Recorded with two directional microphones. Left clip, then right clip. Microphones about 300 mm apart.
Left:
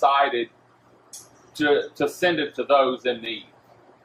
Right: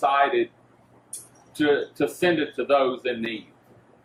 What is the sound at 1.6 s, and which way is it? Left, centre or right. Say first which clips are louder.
Speech: left 1 dB; centre.